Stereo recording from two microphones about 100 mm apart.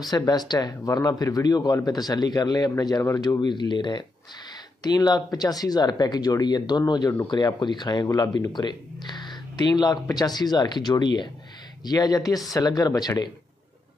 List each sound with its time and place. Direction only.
0.1 s speech: 45° left (ahead or behind)